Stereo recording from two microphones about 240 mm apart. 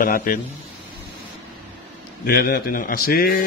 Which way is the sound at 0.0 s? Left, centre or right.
Left.